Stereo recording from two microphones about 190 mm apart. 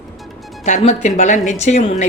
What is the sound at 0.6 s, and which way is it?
A woman's voice, 40° left (ahead or behind).